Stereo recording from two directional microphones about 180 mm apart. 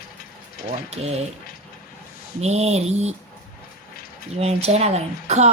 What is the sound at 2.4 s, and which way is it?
Speech, 35° right (ahead or behind).